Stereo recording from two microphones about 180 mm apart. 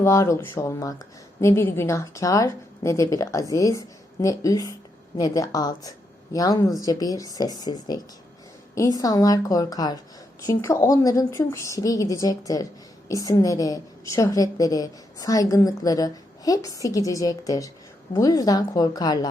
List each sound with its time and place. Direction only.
0.0 s a woman's voice: 15° left (ahead or behind)